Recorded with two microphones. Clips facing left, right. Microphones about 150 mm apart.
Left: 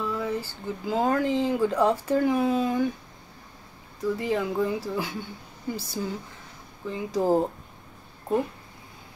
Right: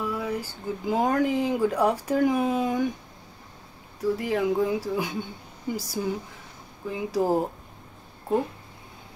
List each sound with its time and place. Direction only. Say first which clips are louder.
0.0 s speech: even; 10° right (ahead or behind)
4.0 s speech: right 1 dB; 10° right (ahead or behind)